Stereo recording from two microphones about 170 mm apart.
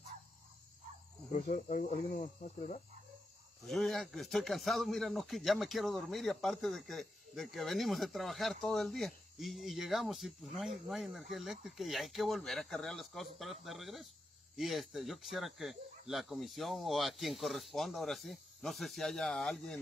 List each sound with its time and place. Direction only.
1.3 s speech: 45° left (ahead or behind)
3.6 s speech: centre (ahead or behind)